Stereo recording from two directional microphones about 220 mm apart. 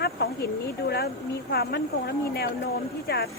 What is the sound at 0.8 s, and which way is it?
A woman's voice, 45° left (ahead or behind).